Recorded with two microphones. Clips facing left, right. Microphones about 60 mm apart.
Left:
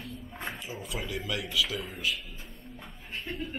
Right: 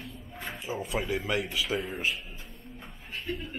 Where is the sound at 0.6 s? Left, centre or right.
Right.